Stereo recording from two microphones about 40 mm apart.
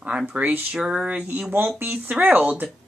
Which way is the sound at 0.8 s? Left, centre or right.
Right.